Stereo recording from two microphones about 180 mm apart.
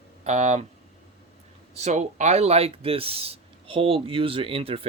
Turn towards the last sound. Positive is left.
turn(degrees=-30)  # may be behind; listen again after turning